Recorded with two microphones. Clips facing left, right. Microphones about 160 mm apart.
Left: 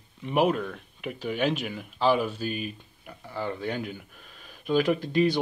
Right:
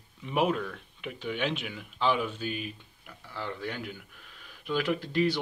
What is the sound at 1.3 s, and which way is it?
Speech, 10° left (ahead or behind).